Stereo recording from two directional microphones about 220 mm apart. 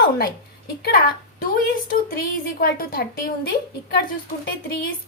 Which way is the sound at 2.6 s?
45° left (ahead or behind).